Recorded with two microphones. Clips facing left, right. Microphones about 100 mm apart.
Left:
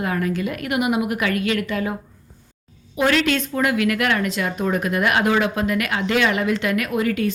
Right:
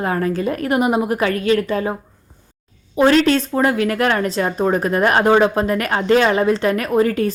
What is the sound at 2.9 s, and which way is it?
Speech, 35° right (ahead or behind).